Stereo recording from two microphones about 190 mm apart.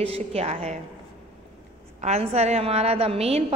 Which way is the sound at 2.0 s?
35° right (ahead or behind).